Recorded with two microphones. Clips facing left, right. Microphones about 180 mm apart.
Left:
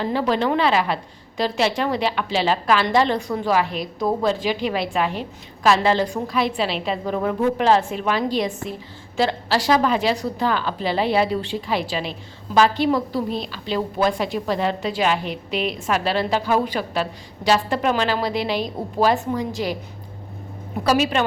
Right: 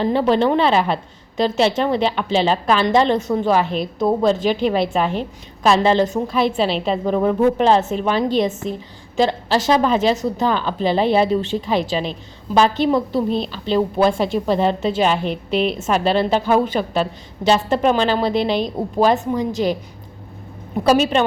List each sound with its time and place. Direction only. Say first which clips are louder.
0.0 s a woman's voice: right 5 dB; 25° right (ahead or behind)
4.9 s a woman's voice: right 3 dB; 5° left (ahead or behind)
5.6 s a woman's voice: right 3 dB; 25° right (ahead or behind)